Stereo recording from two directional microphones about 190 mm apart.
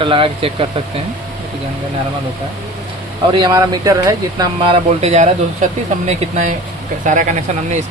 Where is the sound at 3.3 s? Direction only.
20° right (ahead or behind).